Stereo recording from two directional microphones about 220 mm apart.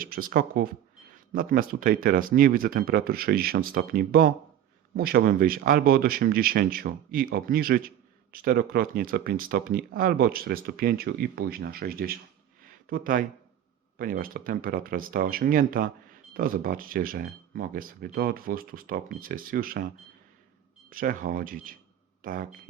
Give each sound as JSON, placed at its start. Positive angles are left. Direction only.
{"t": 0.0, "sound": "speech", "side_deg": -40}
{"t": 20.9, "sound": "speech", "side_deg": -40}